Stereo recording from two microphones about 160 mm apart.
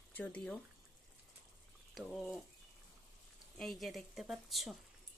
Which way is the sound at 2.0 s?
Centre (ahead or behind).